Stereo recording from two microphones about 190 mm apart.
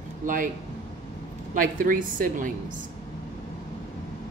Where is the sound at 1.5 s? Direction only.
45° right (ahead or behind).